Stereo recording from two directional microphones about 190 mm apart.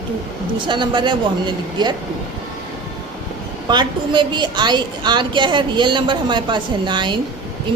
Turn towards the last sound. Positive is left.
turn(degrees=-25)  # may be behind; listen again after turning